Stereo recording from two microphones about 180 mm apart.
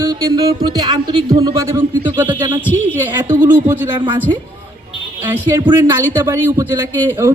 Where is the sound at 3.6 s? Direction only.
10° right (ahead or behind).